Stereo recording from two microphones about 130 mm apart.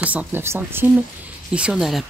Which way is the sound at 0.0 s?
10° right (ahead or behind).